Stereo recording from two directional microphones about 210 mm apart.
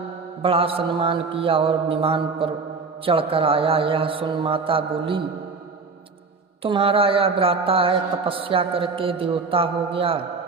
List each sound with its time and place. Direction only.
0.4 s mantra: 25° right (ahead or behind)
6.6 s mantra: 25° right (ahead or behind)